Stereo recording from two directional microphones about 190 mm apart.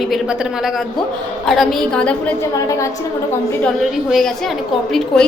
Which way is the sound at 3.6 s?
Centre (ahead or behind).